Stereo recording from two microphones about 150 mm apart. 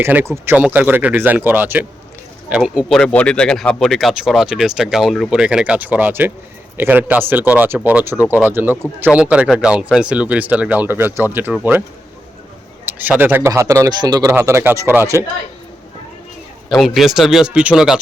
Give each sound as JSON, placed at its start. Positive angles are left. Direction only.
{"t": 0.0, "sound": "speech", "side_deg": -15}
{"t": 12.8, "sound": "speech", "side_deg": -10}
{"t": 16.6, "sound": "speech", "side_deg": 0}